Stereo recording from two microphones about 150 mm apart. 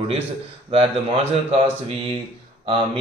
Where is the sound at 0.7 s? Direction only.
40° right (ahead or behind).